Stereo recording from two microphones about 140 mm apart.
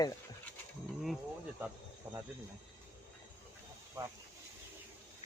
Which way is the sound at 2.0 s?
15° right (ahead or behind).